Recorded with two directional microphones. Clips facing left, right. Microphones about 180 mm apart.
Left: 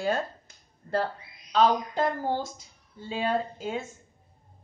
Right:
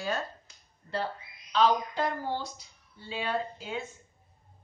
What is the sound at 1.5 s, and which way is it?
A woman's voice, 45° left (ahead or behind).